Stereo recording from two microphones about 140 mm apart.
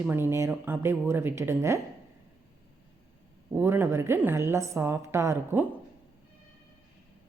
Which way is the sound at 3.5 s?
15° right (ahead or behind).